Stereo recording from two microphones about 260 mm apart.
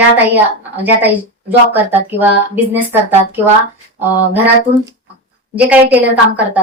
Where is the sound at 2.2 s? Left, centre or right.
Centre.